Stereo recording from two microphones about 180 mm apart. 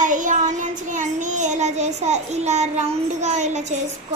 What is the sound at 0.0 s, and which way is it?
Child singing, 45° right (ahead or behind).